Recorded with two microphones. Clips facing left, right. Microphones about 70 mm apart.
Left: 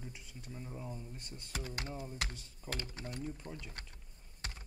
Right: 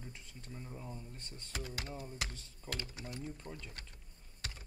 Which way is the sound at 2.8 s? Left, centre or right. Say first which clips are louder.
Left 3 dB; left.